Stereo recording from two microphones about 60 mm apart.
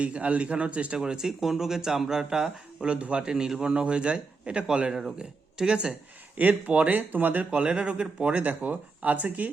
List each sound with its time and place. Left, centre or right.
0.0 s speech: right
7.5 s speech: centre